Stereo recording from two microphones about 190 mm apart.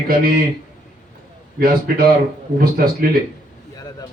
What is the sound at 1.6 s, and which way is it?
Speech, 50° right (ahead or behind).